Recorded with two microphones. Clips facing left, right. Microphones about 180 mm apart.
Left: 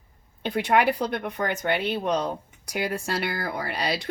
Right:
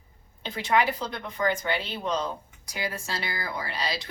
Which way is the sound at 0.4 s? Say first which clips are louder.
Left 3 dB; 60° left (ahead or behind).